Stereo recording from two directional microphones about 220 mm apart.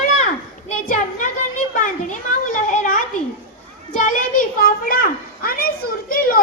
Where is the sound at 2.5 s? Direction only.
35° left (ahead or behind).